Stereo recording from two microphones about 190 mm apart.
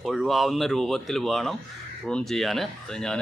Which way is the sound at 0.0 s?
Centre (ahead or behind).